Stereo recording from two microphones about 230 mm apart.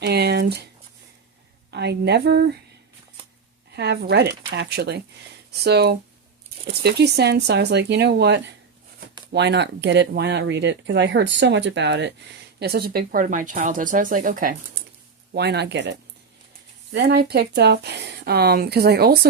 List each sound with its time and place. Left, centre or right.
0.0 s squish: right
1.7 s speech: right
3.8 s speech: right
16.9 s speech: right